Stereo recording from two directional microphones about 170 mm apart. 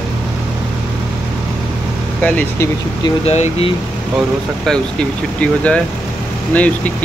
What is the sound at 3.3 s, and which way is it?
Speech, 35° left (ahead or behind).